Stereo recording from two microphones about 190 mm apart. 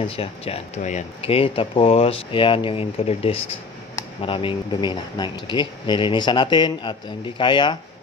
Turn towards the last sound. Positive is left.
turn(degrees=25)  # may be behind; listen again after turning